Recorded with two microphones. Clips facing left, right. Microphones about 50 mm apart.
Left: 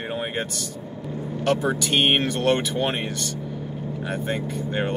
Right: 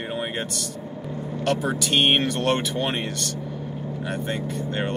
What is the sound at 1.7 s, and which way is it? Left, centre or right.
Speech, centre.